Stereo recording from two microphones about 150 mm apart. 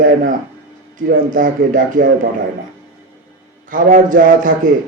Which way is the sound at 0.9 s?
65° right (ahead or behind).